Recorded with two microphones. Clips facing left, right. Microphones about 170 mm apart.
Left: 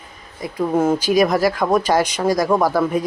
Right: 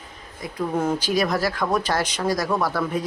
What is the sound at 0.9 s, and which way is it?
Speech, 10° left (ahead or behind).